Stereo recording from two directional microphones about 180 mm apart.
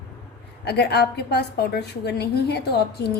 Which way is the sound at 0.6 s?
65° left (ahead or behind).